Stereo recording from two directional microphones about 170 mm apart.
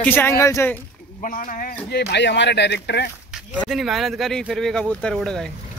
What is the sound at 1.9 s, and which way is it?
Speech, 80° left.